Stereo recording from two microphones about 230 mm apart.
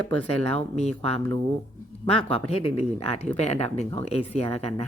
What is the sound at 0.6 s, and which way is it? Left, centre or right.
Speech, left.